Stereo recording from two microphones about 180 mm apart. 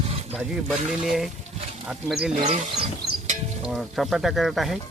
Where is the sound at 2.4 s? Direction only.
35° right (ahead or behind).